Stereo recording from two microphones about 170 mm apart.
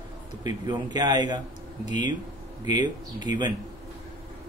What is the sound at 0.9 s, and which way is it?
A man's voice, 25° right (ahead or behind).